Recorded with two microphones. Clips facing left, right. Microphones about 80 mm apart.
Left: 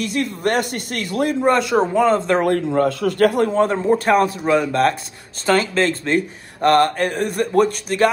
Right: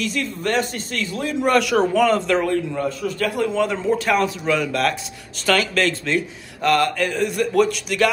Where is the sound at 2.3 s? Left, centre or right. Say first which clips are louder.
Left 3 dB; left.